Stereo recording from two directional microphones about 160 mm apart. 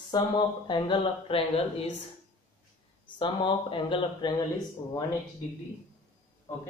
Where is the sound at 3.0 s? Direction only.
30° left (ahead or behind).